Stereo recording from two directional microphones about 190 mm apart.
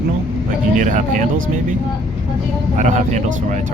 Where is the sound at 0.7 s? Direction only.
45° right (ahead or behind).